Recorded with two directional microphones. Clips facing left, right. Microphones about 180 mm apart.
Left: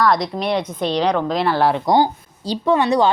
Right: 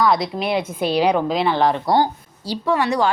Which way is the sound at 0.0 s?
5° right (ahead or behind).